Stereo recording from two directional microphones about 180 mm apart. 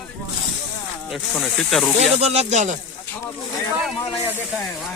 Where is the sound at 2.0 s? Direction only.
35° right (ahead or behind).